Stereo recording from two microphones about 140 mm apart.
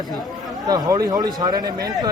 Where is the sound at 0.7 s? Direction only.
25° right (ahead or behind).